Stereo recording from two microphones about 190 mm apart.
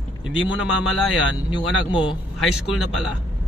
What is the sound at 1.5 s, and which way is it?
Speech, 25° left (ahead or behind).